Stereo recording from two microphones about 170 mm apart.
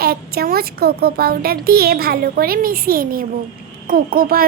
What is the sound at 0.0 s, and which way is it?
A child's voice, 65° right (ahead or behind).